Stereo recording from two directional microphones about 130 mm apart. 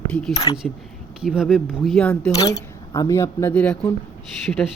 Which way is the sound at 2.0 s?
10° left (ahead or behind).